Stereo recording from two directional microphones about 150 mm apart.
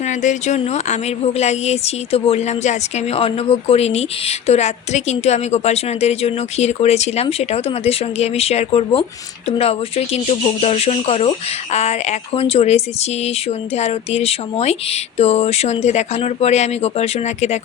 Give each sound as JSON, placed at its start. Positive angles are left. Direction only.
{"t": 0.0, "sound": "a woman's voice", "side_deg": 55}